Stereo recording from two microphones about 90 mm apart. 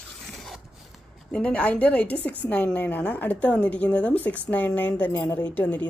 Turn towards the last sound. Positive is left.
turn(degrees=15)  # may be behind; listen again after turning